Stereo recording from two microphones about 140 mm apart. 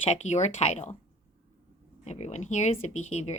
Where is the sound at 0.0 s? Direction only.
50° left (ahead or behind).